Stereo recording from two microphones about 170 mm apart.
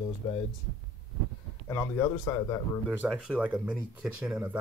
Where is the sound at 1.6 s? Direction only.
20° left (ahead or behind).